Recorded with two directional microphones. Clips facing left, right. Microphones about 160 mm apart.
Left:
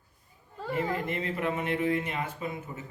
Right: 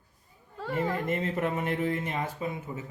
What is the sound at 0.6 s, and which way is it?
Speech, centre (ahead or behind).